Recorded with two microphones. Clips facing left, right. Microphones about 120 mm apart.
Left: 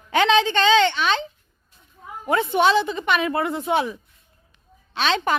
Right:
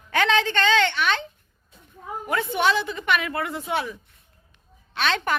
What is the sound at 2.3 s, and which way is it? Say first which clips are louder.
Speech: left 4 dB; 25° left (ahead or behind).